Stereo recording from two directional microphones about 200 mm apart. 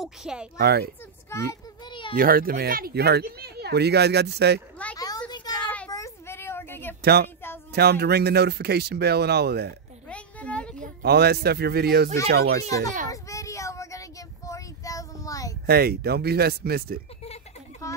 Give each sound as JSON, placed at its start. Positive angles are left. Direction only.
{"t": 0.0, "sound": "speech", "side_deg": -5}
{"t": 0.6, "sound": "speech", "side_deg": -50}
{"t": 1.3, "sound": "child singing", "side_deg": 15}
{"t": 2.1, "sound": "speech", "side_deg": -45}
{"t": 4.9, "sound": "a sound", "side_deg": 20}
{"t": 7.0, "sound": "speech", "side_deg": -50}
{"t": 10.0, "sound": "a sound", "side_deg": 5}
{"t": 11.0, "sound": "speech", "side_deg": -55}
{"t": 13.1, "sound": "child singing", "side_deg": 15}
{"t": 15.6, "sound": "speech", "side_deg": -50}
{"t": 17.9, "sound": "children playing", "side_deg": 15}